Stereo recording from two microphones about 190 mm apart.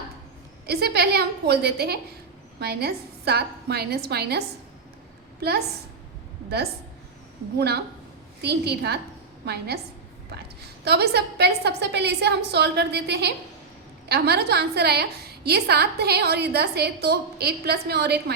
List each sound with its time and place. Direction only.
0.7 s a woman's voice: 55° right (ahead or behind)
8.4 s a woman's voice: 60° right (ahead or behind)